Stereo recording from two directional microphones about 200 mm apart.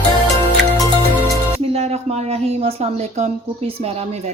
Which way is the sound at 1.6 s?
30° right (ahead or behind).